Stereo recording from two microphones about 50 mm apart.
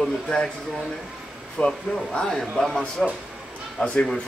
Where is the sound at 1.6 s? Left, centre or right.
Left.